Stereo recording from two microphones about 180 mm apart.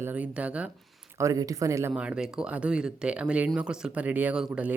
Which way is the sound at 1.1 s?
20° right (ahead or behind).